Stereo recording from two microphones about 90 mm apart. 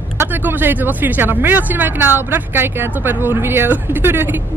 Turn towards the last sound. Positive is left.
turn(degrees=-25)  # may be behind; listen again after turning